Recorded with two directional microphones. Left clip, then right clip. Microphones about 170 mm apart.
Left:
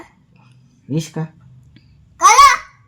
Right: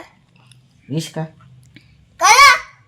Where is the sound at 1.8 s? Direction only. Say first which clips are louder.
Right 7 dB; centre (ahead or behind).